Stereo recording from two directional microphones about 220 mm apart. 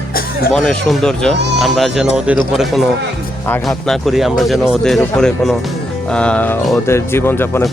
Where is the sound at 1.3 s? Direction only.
50° right (ahead or behind).